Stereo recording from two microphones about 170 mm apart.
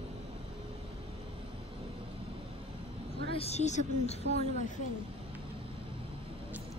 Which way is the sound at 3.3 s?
35° left (ahead or behind).